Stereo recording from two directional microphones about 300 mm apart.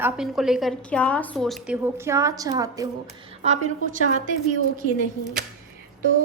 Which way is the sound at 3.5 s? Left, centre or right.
Right.